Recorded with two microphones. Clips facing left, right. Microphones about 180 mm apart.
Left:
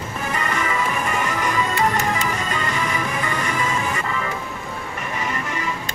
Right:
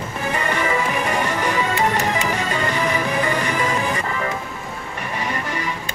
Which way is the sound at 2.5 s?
30° right (ahead or behind).